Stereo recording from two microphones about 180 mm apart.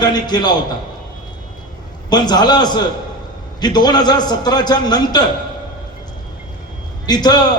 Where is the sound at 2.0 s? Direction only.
25° left (ahead or behind).